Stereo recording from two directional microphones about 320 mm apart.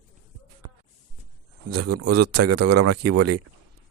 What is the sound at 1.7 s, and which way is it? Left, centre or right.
Speech, right.